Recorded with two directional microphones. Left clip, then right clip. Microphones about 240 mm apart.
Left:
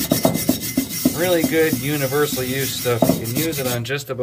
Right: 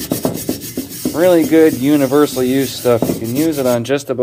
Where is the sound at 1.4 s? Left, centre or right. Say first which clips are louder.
Right 8 dB; right.